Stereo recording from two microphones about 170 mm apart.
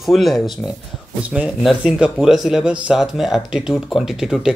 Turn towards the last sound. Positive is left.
turn(degrees=-5)  # may be behind; listen again after turning